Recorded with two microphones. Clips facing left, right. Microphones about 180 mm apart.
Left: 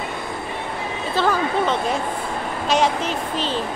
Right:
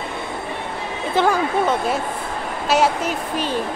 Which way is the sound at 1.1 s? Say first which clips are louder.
Right 2 dB; 10° right (ahead or behind).